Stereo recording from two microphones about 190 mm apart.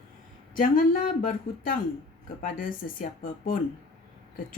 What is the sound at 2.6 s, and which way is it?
Speech, 45° left (ahead or behind).